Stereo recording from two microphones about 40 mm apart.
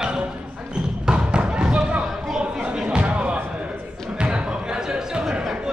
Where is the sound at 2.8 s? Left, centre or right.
Right.